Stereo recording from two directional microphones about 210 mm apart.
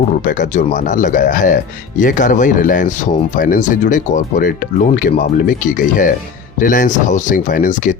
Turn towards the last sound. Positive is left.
turn(degrees=40)  # may be behind; listen again after turning